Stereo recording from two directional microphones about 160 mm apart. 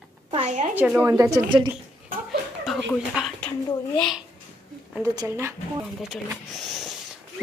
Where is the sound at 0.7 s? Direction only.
10° right (ahead or behind).